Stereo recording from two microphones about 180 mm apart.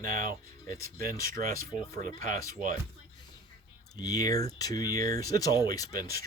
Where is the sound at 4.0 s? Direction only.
20° left (ahead or behind).